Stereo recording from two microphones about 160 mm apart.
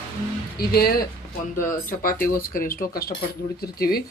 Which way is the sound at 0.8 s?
70° left (ahead or behind).